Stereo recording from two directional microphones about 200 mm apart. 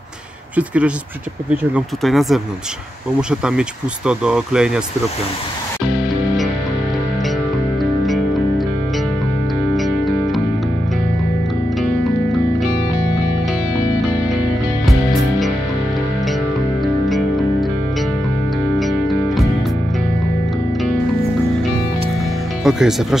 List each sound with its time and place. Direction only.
0.6 s speech: 5° right (ahead or behind)
2.0 s speech: centre (ahead or behind)
5.9 s music: 5° right (ahead or behind)
8.0 s music: centre (ahead or behind)
9.8 s music: centre (ahead or behind)
16.8 s music: centre (ahead or behind)
18.8 s music: centre (ahead or behind)
22.6 s speech: centre (ahead or behind)